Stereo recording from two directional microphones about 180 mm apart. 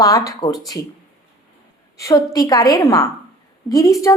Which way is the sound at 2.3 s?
20° left (ahead or behind).